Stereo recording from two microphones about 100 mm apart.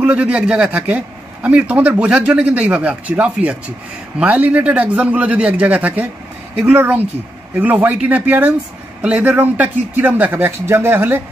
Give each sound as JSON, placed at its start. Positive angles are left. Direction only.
{"t": 0.0, "sound": "a man's voice", "side_deg": -15}